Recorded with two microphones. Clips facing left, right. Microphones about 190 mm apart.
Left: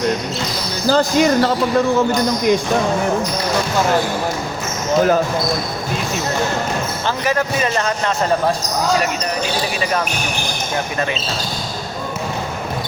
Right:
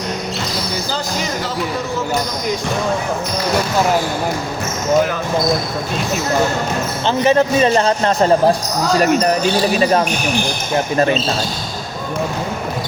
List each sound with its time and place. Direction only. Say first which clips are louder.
7.3 s speech: right 7 dB; 30° right (ahead or behind)